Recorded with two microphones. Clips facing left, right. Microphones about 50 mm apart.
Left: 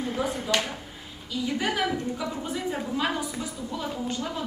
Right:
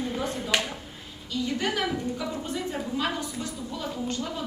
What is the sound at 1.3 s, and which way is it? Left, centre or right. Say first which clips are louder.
A woman's voice: even; centre.